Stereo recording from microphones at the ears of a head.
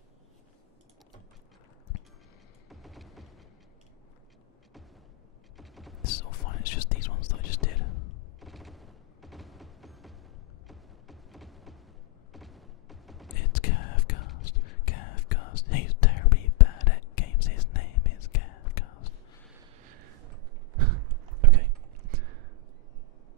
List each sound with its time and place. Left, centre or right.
2.7 s music: centre
6.0 s whispering: left
8.4 s fusillade: centre
10.7 s music: centre
12.3 s a sound: centre
13.3 s whispering: left
19.8 s a sound: right